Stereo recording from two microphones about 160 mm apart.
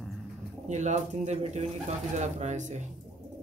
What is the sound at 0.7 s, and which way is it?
Speech, 45° right (ahead or behind).